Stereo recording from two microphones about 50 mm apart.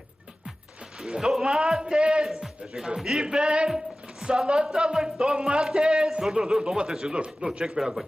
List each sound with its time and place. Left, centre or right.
0.9 s a man's voice: centre
2.2 s a man's voice: centre